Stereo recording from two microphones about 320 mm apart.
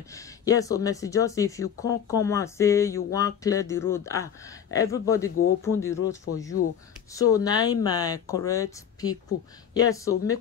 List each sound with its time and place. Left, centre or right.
0.1 s speech: centre
6.6 s speech: left
7.2 s speech: centre